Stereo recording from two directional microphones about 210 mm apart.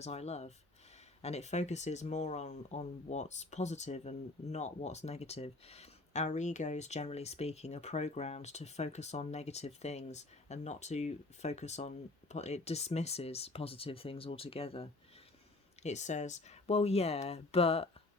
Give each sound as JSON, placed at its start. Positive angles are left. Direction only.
{"t": 0.0, "sound": "speech", "side_deg": 30}